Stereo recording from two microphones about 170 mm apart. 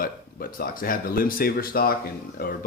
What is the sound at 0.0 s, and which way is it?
Speech, 55° left (ahead or behind).